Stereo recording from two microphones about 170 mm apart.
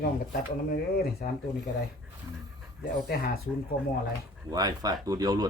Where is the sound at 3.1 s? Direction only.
65° left (ahead or behind).